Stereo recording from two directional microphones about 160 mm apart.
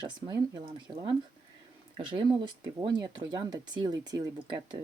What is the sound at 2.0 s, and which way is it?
Speech, 30° right (ahead or behind).